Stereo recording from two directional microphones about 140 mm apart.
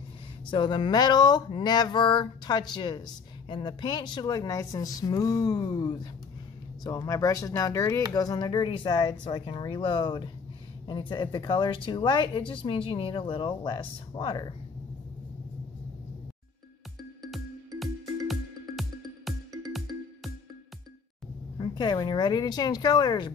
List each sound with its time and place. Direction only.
0.5 s a woman's voice: 35° left (ahead or behind)
18.2 s music: centre (ahead or behind)
21.5 s a woman's voice: 30° left (ahead or behind)